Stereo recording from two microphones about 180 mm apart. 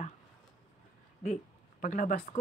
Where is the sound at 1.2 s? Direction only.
45° left (ahead or behind).